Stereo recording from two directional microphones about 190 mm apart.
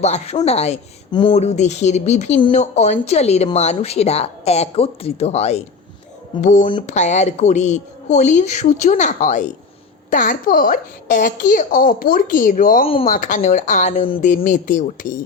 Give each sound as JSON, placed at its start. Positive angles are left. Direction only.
{"t": 0.0, "sound": "speech", "side_deg": 35}
{"t": 1.4, "sound": "a woman's voice", "side_deg": 35}
{"t": 12.8, "sound": "speech", "side_deg": 30}
{"t": 13.1, "sound": "a woman's voice", "side_deg": 45}